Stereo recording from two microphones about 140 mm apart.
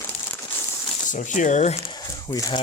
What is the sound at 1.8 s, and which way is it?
Speech, 30° left (ahead or behind).